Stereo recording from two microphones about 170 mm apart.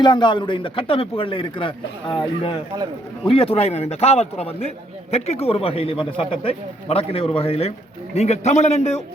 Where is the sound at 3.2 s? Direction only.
35° left (ahead or behind).